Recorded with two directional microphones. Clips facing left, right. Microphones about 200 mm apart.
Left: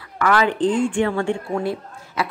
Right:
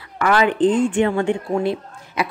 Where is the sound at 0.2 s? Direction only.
20° right (ahead or behind).